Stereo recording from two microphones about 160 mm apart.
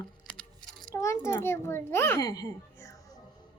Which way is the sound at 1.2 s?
15° left (ahead or behind).